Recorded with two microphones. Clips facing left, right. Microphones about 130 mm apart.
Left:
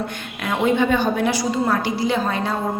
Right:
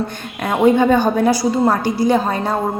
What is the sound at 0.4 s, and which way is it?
A woman's voice, 45° right (ahead or behind).